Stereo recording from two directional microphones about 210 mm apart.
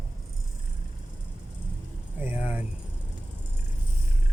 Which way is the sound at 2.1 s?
10° right (ahead or behind).